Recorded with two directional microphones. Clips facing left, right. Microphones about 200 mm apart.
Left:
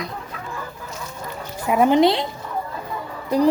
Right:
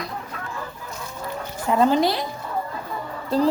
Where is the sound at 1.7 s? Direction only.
15° left (ahead or behind).